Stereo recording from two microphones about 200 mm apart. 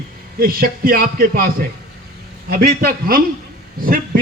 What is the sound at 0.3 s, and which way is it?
A man's voice, 45° right (ahead or behind).